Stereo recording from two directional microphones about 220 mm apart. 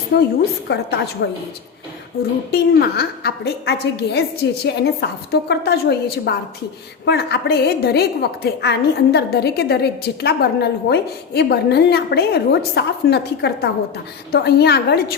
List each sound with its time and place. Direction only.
0.1 s a woman's voice: 45° left (ahead or behind)
2.5 s a woman's voice: 45° left (ahead or behind)